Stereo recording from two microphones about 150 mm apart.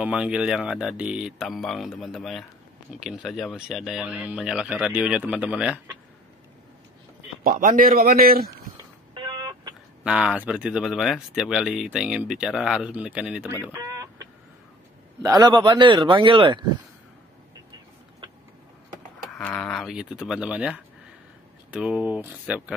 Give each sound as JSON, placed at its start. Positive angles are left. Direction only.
{"t": 0.0, "sound": "speech", "side_deg": -5}
{"t": 7.4, "sound": "a man's voice", "side_deg": -65}
{"t": 9.1, "sound": "a sound", "side_deg": -25}
{"t": 10.0, "sound": "speech", "side_deg": -5}
{"t": 13.7, "sound": "chicken", "side_deg": -20}
{"t": 15.2, "sound": "a man's voice", "side_deg": -25}
{"t": 19.3, "sound": "speech", "side_deg": 5}